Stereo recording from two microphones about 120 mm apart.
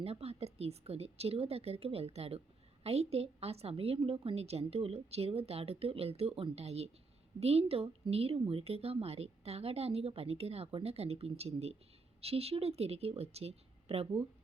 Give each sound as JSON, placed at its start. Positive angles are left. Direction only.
{"t": 0.0, "sound": "a woman's voice", "side_deg": -55}